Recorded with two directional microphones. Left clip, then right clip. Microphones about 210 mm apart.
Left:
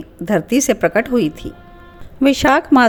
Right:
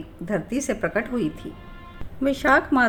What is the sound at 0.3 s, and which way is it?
A woman's voice, 40° left (ahead or behind).